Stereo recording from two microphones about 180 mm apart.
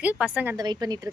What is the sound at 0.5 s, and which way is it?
Speech, 20° right (ahead or behind).